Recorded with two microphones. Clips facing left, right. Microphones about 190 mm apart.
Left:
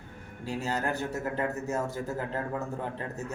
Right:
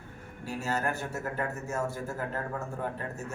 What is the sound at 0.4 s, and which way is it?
A man's voice, 15° left (ahead or behind).